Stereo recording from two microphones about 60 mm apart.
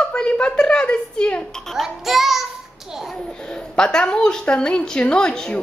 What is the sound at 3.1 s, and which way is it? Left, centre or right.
A woman's voice, centre.